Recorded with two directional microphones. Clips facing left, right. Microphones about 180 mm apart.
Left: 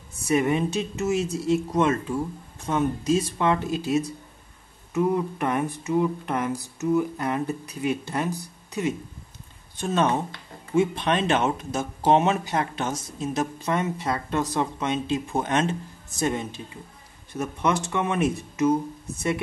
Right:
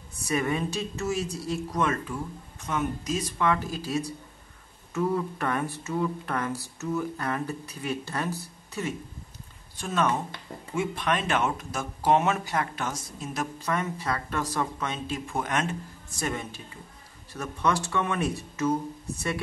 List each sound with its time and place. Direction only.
0.2 s speech: 25° left (ahead or behind)